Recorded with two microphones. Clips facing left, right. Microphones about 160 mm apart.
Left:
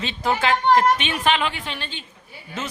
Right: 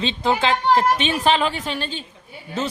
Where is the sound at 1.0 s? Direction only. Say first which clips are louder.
Right 3 dB; 35° right (ahead or behind).